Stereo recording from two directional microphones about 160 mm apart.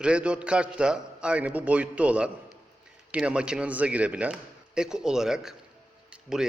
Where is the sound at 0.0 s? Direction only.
5° right (ahead or behind).